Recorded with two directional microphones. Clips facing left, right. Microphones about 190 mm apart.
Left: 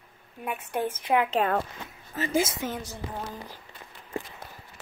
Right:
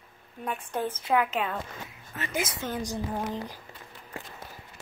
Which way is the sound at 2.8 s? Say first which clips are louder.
Right 5 dB; 15° right (ahead or behind).